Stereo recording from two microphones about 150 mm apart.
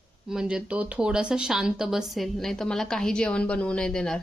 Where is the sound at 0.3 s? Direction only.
5° right (ahead or behind).